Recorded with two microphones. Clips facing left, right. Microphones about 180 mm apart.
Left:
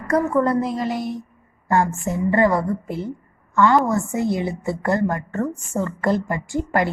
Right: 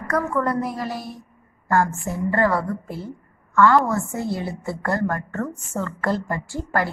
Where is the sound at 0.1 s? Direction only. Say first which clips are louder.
Left 4 dB; 25° left (ahead or behind).